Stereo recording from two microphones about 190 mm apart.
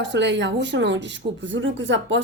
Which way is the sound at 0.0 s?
65° right (ahead or behind).